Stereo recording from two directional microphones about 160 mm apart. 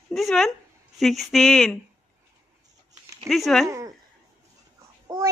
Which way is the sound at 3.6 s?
20° right (ahead or behind).